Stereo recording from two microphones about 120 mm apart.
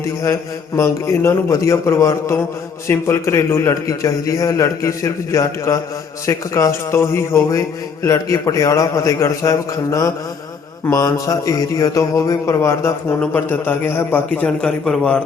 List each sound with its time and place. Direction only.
0.0 s speech: 25° left (ahead or behind)